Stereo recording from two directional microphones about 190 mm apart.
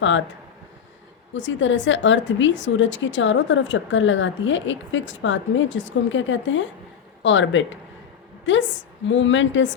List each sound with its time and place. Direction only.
1.3 s a woman's voice: 75° left (ahead or behind)